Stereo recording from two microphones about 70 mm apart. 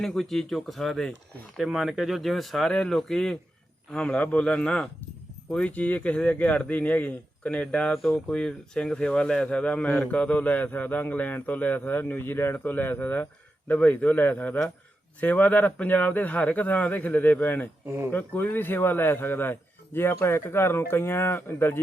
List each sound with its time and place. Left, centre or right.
0.0 s a man's voice: centre; by 17.7 s left
17.8 s speech: right
18.1 s a man's voice: left